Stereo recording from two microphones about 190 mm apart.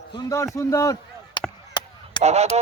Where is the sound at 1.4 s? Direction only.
25° left (ahead or behind).